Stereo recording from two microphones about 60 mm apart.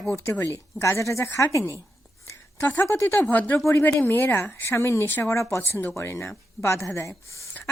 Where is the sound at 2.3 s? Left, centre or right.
Left.